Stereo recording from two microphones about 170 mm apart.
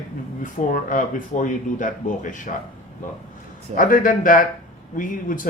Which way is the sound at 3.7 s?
55° left (ahead or behind).